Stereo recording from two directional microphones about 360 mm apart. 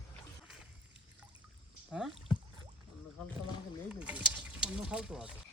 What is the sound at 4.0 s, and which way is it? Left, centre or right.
Speech, centre.